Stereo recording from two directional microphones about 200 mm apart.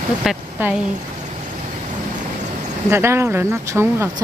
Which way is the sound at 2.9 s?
10° right (ahead or behind).